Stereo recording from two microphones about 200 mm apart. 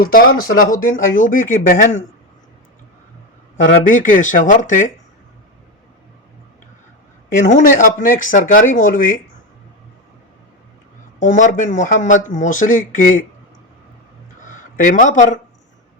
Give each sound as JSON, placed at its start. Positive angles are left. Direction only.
{"t": 0.0, "sound": "speech", "side_deg": 45}
{"t": 3.8, "sound": "speech", "side_deg": 40}
{"t": 7.3, "sound": "speech", "side_deg": 40}
{"t": 11.2, "sound": "speech", "side_deg": 40}
{"t": 14.4, "sound": "speech", "side_deg": 40}